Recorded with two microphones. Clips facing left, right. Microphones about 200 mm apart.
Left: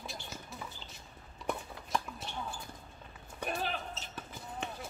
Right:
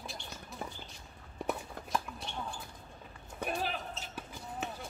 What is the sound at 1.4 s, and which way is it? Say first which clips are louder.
Horse: right 1 dB; 55° right (ahead or behind).